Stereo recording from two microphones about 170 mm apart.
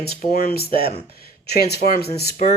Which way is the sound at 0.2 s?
60° left (ahead or behind).